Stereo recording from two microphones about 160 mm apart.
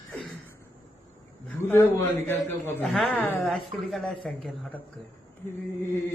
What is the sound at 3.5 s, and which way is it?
Speech, centre (ahead or behind).